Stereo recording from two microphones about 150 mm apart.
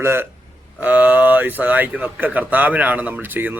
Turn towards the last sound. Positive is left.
turn(degrees=-15)  # may be behind; listen again after turning